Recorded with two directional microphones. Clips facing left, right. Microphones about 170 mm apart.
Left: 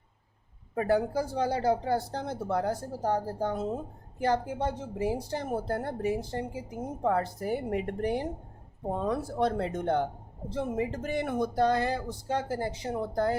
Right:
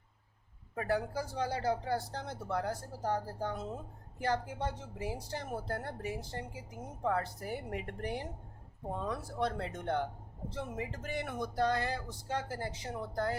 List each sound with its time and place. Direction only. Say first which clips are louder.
0.8 s speech: left 7 dB; 25° left (ahead or behind)